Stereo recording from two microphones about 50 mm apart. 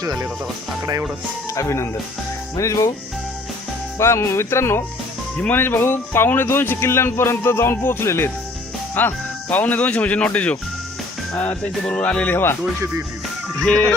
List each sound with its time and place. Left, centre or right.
1.5 s speech: left
3.9 s speech: left
5.5 s speech: left
8.0 s speech: left
9.0 s speech: left
12.3 s speech: left